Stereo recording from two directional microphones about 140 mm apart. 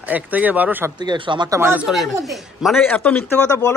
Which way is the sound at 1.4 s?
20° right (ahead or behind).